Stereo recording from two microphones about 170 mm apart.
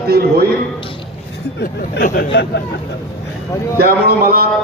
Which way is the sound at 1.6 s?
55° left (ahead or behind).